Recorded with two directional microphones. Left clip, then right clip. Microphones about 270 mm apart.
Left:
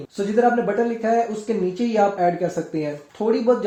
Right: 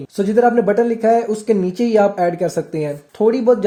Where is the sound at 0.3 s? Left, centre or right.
Right.